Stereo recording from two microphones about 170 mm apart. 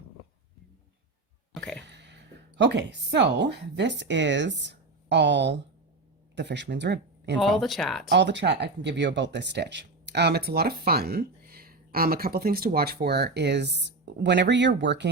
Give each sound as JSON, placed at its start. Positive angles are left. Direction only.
{"t": 1.5, "sound": "a sound", "side_deg": 5}
{"t": 1.9, "sound": "a woman's voice", "side_deg": -90}
{"t": 7.3, "sound": "speech", "side_deg": 0}
{"t": 8.1, "sound": "speech", "side_deg": -90}